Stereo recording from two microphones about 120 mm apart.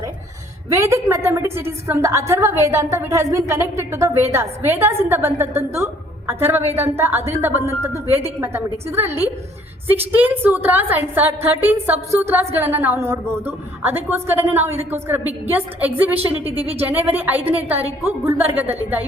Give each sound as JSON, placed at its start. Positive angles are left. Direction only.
{"t": 0.7, "sound": "a woman's voice", "side_deg": -25}